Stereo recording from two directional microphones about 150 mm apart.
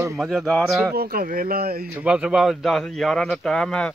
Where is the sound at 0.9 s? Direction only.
85° right.